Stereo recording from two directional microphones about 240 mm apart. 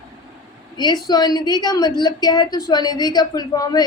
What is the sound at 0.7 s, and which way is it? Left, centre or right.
A woman's voice, centre.